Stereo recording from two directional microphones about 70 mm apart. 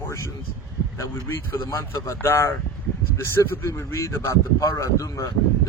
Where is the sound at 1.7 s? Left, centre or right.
Left.